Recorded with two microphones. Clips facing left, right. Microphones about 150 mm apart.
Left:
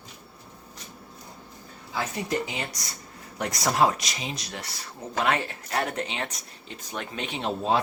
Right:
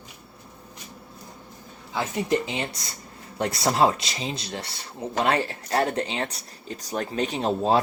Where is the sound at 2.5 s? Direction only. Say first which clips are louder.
Right 4 dB; 25° right (ahead or behind).